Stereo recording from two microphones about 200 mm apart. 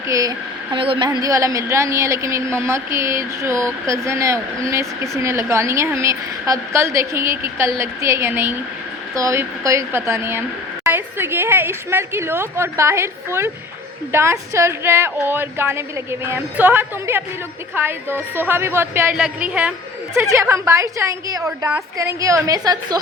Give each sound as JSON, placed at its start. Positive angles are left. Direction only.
{"t": 0.1, "sound": "a woman's voice", "side_deg": -20}